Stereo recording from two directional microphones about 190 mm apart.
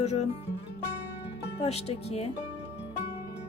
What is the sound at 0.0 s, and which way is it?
Speech, 35° left (ahead or behind).